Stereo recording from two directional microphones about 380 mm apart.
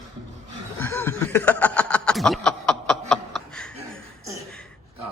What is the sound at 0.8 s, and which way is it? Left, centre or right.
Snicker, centre.